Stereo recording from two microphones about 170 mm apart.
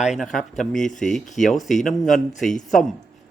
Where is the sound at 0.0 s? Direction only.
Centre (ahead or behind).